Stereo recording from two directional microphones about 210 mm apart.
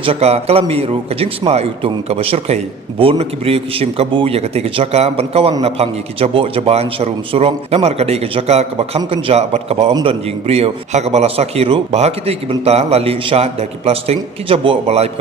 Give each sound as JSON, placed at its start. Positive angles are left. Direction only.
{"t": 0.0, "sound": "a man's voice", "side_deg": -30}